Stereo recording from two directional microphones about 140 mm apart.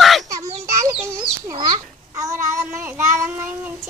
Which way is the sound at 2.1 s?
20° right (ahead or behind).